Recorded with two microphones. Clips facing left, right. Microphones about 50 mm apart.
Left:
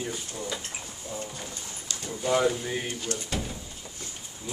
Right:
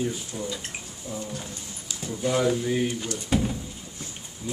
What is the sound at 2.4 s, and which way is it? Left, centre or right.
Speech, centre.